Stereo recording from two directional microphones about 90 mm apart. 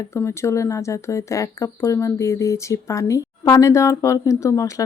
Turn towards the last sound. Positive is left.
turn(degrees=35)  # may be behind; listen again after turning